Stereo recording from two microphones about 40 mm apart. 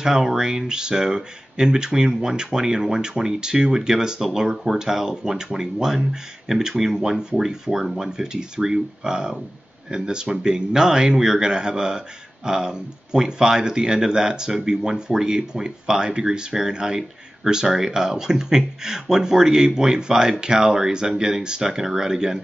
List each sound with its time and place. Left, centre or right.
0.0 s speech: centre
8.2 s speech: centre